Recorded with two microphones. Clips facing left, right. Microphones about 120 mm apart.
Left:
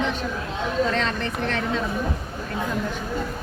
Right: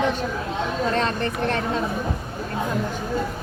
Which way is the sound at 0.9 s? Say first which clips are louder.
Right 2 dB; 45° right (ahead or behind).